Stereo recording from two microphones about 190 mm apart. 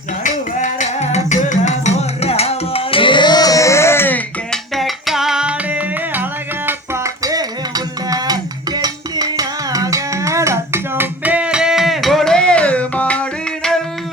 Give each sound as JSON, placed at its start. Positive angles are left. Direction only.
{"t": 0.6, "sound": "music", "side_deg": 40}